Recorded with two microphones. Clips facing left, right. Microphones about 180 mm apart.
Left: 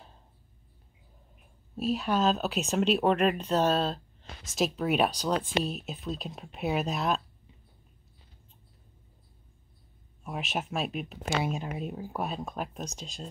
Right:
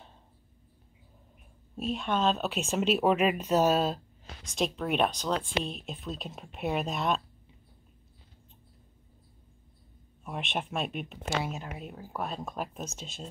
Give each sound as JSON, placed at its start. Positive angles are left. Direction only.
{"t": 1.8, "sound": "speech", "side_deg": 5}
{"t": 4.4, "sound": "speech", "side_deg": 5}
{"t": 10.2, "sound": "speech", "side_deg": 0}
{"t": 11.4, "sound": "speech", "side_deg": 20}
{"t": 12.4, "sound": "speech", "side_deg": 0}